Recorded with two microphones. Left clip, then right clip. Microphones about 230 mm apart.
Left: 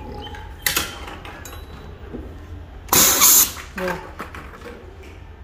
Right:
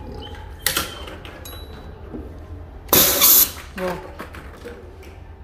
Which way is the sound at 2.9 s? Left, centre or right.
Centre.